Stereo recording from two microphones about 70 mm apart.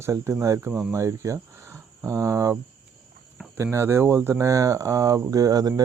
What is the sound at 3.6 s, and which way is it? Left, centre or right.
Speech, right.